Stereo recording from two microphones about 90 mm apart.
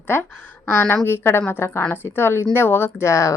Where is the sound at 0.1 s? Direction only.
25° left (ahead or behind).